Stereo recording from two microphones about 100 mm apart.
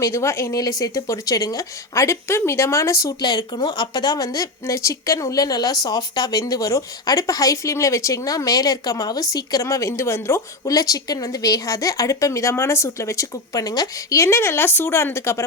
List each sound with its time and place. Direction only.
0.0 s a woman's voice: 30° left (ahead or behind)
3.2 s a woman's voice: 45° left (ahead or behind); by 15.4 s 25° left (ahead or behind)